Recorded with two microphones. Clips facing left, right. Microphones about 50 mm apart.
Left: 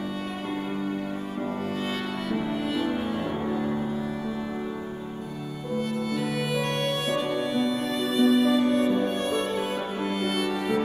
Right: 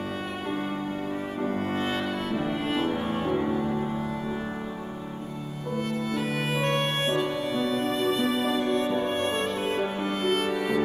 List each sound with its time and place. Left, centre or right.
1.4 s music: right
5.8 s music: right